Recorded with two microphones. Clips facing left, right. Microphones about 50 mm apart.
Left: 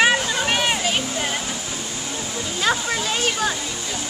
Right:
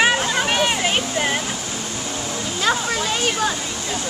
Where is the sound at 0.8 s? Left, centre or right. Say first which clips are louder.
Right 3 dB; right.